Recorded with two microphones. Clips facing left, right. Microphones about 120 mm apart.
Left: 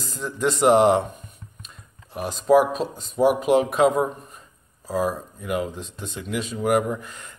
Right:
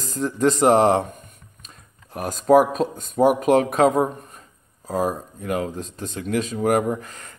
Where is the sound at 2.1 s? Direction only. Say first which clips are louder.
Right 2 dB; 45° right (ahead or behind).